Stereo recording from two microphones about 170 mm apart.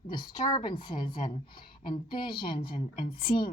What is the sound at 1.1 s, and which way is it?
Speech, 55° left (ahead or behind).